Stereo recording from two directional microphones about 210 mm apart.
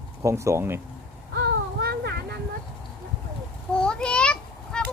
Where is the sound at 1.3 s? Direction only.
50° right (ahead or behind).